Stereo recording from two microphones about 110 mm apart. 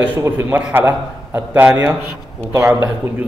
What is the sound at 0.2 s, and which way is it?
Speech, 20° right (ahead or behind).